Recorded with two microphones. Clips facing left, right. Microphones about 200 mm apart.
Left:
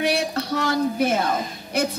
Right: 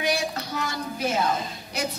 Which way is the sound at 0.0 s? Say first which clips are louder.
Left 4 dB; 65° left (ahead or behind).